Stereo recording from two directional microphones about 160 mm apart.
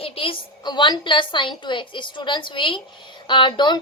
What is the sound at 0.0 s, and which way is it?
A woman's voice, 35° left (ahead or behind).